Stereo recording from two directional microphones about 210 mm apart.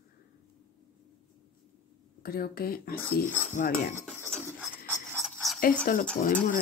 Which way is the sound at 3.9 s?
10° right (ahead or behind).